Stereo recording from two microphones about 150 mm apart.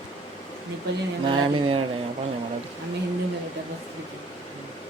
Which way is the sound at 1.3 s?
40° right (ahead or behind).